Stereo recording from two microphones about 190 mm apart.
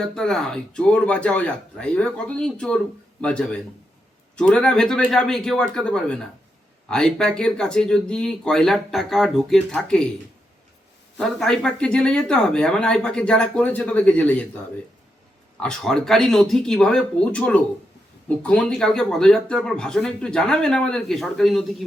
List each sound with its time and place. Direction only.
0.1 s speech: centre (ahead or behind)
11.2 s speech: 5° left (ahead or behind)
15.6 s speech: 5° left (ahead or behind)